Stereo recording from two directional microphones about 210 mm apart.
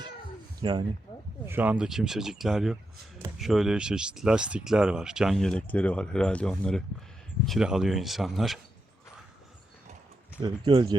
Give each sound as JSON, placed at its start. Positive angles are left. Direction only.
{"t": 0.6, "sound": "speech", "side_deg": -20}
{"t": 1.5, "sound": "speech", "side_deg": -10}
{"t": 10.4, "sound": "speech", "side_deg": -20}